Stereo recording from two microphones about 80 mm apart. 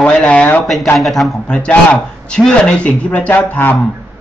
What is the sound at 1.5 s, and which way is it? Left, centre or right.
Speech, centre.